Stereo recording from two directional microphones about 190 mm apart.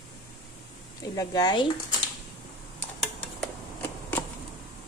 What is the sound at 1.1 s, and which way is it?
Speech, 20° left (ahead or behind).